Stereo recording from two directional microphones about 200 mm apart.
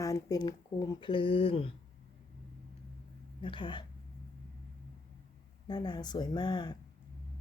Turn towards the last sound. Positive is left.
turn(degrees=20)  # may be behind; listen again after turning